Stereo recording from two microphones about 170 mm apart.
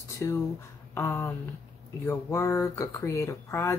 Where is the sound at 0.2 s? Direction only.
15° left (ahead or behind).